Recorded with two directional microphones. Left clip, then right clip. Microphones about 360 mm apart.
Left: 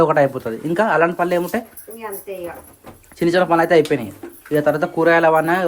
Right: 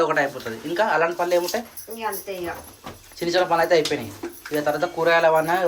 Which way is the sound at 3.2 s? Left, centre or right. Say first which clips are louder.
Left 4 dB; centre.